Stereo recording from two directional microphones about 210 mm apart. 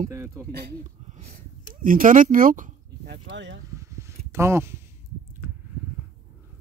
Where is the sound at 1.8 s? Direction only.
40° right (ahead or behind).